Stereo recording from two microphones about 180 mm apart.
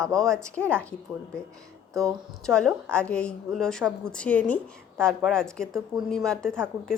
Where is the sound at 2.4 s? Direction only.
5° left (ahead or behind).